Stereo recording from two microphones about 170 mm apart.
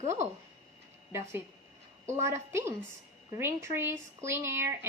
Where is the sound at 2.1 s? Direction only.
15° right (ahead or behind).